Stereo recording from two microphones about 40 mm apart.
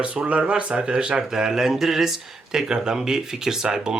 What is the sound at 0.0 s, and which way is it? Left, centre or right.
Speech, right.